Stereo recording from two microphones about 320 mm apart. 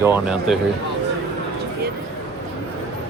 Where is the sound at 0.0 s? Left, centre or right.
Centre.